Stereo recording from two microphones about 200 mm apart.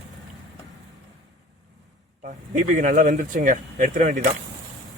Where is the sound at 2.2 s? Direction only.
40° right (ahead or behind).